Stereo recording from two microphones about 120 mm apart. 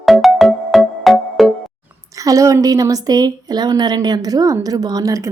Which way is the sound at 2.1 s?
30° right (ahead or behind).